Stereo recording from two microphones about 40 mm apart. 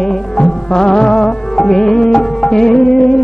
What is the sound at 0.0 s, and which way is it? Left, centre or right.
Music, centre.